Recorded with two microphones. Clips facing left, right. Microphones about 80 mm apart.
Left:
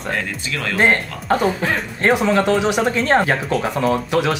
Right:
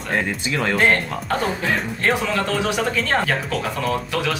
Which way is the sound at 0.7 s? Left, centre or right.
Left.